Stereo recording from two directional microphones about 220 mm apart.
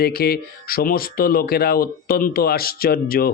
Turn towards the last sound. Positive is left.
turn(degrees=45)  # may be behind; listen again after turning